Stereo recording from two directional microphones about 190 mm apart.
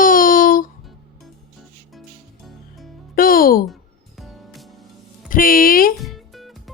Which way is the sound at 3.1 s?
50° left (ahead or behind).